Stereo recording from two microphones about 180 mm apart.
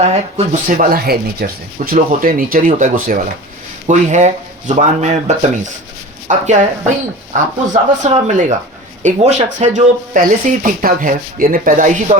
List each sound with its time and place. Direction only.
0.0 s speech: 35° right (ahead or behind)
0.8 s speech: 55° right (ahead or behind)